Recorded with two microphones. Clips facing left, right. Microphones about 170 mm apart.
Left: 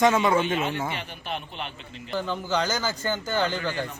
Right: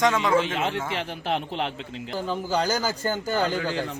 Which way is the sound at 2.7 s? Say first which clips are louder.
Right 2 dB; 40° right (ahead or behind).